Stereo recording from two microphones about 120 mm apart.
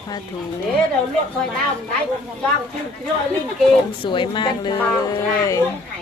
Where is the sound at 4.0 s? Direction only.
40° left (ahead or behind).